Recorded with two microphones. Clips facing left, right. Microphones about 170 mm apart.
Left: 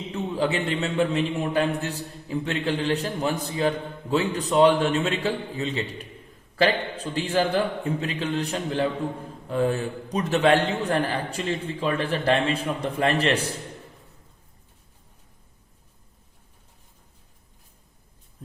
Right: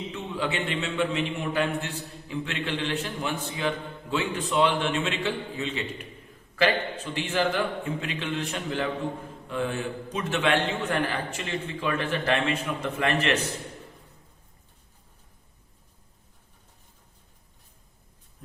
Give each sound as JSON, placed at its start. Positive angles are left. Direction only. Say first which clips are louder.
{"t": 0.1, "sound": "a man's voice", "louder": "left 7 dB", "side_deg": 35}